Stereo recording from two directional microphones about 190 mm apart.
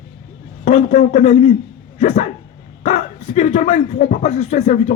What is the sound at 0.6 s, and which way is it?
Speech, 40° left (ahead or behind).